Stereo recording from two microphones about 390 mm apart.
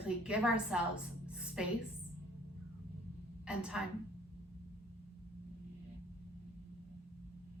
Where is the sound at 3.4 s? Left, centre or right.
Centre.